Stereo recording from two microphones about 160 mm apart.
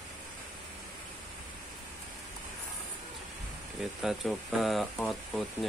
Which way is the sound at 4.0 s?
Centre (ahead or behind).